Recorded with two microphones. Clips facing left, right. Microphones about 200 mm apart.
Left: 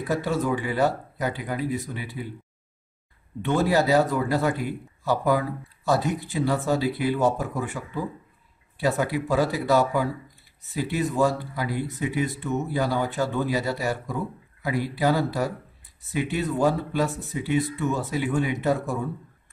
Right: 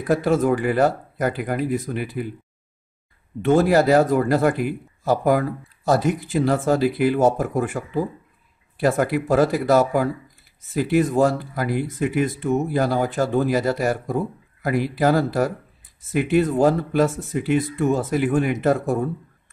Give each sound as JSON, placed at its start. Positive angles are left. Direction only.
{"t": 0.0, "sound": "speech", "side_deg": -50}
{"t": 2.2, "sound": "speech", "side_deg": -65}
{"t": 3.4, "sound": "speech", "side_deg": -45}